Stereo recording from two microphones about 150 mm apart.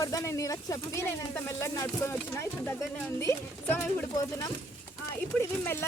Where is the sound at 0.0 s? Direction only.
25° left (ahead or behind).